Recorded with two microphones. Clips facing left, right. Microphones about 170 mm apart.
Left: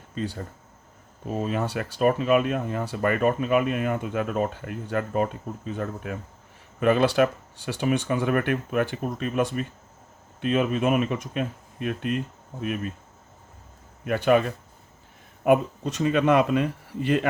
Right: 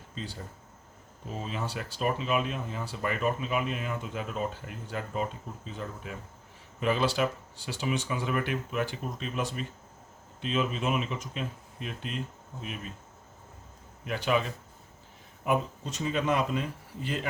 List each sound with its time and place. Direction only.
0.1 s speech: 60° left (ahead or behind)
14.0 s speech: 55° left (ahead or behind)